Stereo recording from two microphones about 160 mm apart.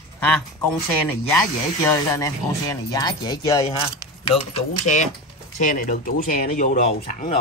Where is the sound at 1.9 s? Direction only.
20° left (ahead or behind).